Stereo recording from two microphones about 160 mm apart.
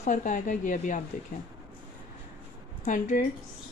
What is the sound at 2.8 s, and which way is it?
Speech, 55° left (ahead or behind).